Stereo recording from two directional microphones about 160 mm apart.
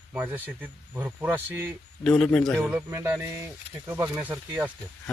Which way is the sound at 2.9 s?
15° right (ahead or behind).